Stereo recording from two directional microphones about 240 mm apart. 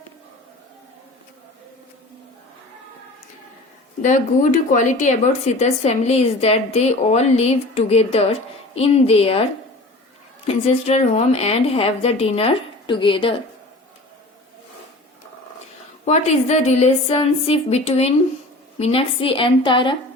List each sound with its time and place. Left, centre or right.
4.0 s speech: left
10.4 s speech: left
16.0 s speech: left